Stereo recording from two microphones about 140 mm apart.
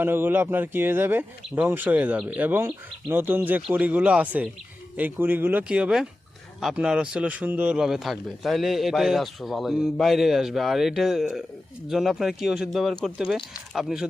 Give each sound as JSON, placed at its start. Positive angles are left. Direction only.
{"t": 0.0, "sound": "a man's voice", "side_deg": -15}